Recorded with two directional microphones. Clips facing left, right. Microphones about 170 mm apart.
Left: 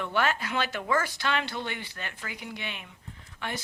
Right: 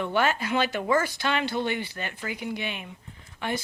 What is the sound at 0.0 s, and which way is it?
Speech, 5° right (ahead or behind).